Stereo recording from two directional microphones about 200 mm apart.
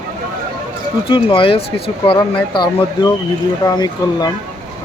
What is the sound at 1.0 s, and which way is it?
Speech, 25° left (ahead or behind).